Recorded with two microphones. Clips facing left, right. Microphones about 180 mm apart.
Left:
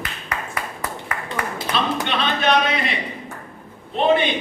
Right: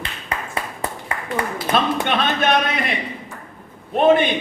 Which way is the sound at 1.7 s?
30° right (ahead or behind).